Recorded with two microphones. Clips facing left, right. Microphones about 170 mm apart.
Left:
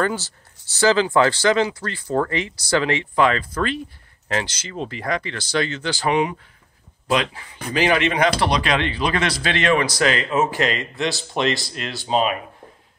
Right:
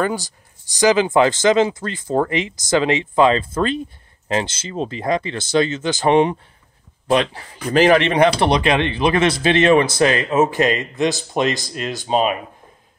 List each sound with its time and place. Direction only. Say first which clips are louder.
0.0 s speech: right 1 dB; 15° right (ahead or behind)
7.1 s speech: right 4 dB; 35° right (ahead or behind)